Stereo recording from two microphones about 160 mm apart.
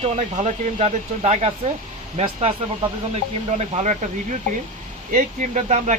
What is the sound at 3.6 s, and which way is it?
Speech, 45° right (ahead or behind).